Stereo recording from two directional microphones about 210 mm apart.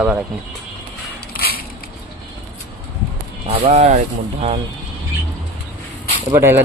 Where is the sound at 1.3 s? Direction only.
45° left (ahead or behind).